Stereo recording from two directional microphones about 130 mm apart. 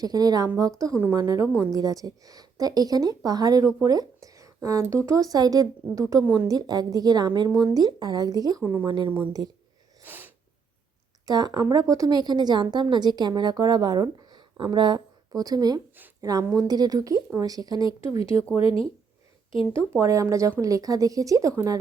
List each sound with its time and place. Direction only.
0.0 s a woman's voice: 30° right (ahead or behind)
8.6 s speech: 15° right (ahead or behind)
8.9 s a woman's voice: 40° right (ahead or behind)
9.1 s a woman's voice: 30° right (ahead or behind)
10.0 s sneeze: 15° right (ahead or behind)
11.3 s a woman's voice: 30° right (ahead or behind)
18.6 s speech: 45° left (ahead or behind)
19.7 s a woman's voice: 20° right (ahead or behind)